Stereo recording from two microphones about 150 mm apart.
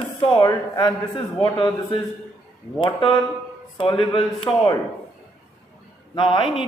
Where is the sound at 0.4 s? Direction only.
25° left (ahead or behind).